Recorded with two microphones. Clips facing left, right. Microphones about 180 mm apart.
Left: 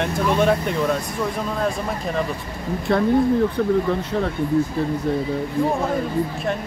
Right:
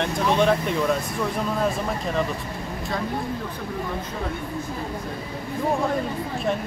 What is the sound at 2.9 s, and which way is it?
Speech, 60° left (ahead or behind).